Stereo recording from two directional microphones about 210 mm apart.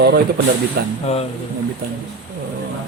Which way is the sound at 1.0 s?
30° left (ahead or behind).